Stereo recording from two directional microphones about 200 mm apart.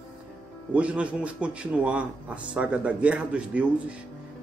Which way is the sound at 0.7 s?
5° right (ahead or behind).